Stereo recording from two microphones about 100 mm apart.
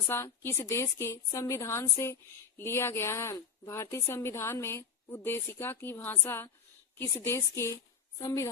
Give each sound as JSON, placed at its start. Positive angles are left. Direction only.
{"t": 0.1, "sound": "a woman's voice", "side_deg": 25}